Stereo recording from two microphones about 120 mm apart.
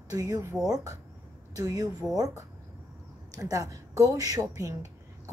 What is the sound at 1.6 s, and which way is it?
A woman's voice, 30° right (ahead or behind).